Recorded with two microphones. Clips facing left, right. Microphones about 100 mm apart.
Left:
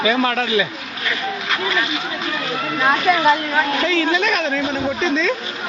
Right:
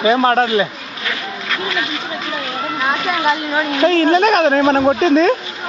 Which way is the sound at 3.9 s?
45° right (ahead or behind).